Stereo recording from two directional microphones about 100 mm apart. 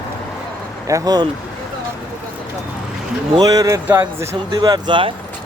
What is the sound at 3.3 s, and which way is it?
Speech, 40° right (ahead or behind).